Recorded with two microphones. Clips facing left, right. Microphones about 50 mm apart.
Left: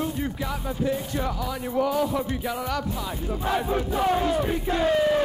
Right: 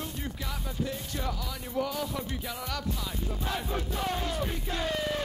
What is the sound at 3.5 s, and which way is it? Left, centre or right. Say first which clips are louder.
Battle cry: left 10 dB; centre.